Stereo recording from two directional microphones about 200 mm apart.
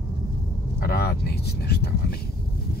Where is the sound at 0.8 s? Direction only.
55° left (ahead or behind).